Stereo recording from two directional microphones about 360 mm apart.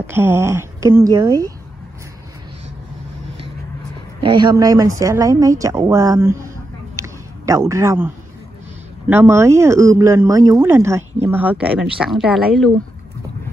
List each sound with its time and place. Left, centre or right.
0.0 s speech: centre
4.2 s speech: centre
7.0 s a sound: centre
9.1 s speech: centre